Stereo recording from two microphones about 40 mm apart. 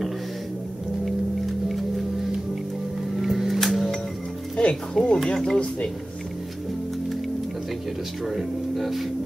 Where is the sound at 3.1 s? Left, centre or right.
Centre.